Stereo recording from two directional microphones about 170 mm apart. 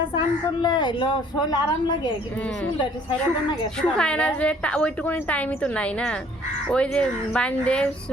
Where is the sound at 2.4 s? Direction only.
5° left (ahead or behind).